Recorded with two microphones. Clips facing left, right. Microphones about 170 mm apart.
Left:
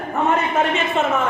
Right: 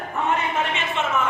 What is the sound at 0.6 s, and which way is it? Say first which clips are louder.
Speech: left 6 dB; 40° left (ahead or behind).